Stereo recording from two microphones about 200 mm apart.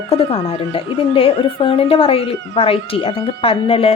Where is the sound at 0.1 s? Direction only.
25° left (ahead or behind).